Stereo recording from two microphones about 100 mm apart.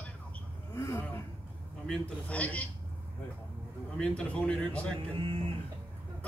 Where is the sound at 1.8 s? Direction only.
15° left (ahead or behind).